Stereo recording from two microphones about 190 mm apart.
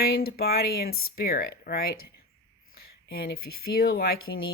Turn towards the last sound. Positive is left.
turn(degrees=55)  # may be behind; listen again after turning